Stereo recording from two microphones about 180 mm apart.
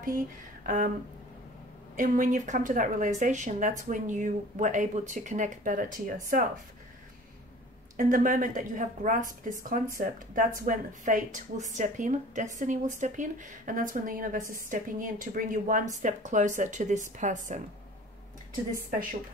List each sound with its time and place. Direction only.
0.7 s a woman's voice: 50° right (ahead or behind)
2.0 s a woman's voice: 50° right (ahead or behind)
8.0 s a woman's voice: 50° right (ahead or behind)